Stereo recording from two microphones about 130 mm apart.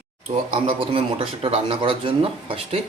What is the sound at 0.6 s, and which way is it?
Speech, 45° right (ahead or behind).